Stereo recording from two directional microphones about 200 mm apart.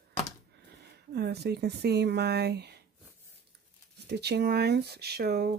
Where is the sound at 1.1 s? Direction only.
55° right (ahead or behind).